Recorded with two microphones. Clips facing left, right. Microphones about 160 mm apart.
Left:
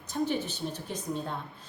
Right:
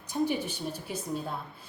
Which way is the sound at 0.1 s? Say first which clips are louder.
Right 1 dB; 10° right (ahead or behind).